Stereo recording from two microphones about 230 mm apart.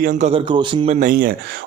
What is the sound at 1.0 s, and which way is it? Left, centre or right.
Speech, right.